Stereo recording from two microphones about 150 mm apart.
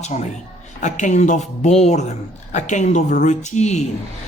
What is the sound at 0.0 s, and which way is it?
Speech, 50° left (ahead or behind).